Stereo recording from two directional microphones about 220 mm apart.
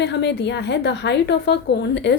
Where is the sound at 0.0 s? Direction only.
50° left (ahead or behind).